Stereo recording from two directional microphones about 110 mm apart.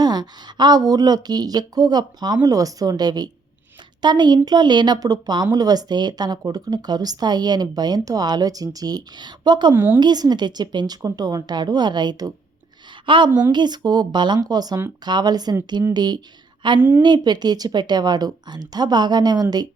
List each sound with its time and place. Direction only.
0.0 s speech: 40° right (ahead or behind)
9.7 s a woman's voice: 20° right (ahead or behind)
10.0 s a woman's voice: 40° right (ahead or behind)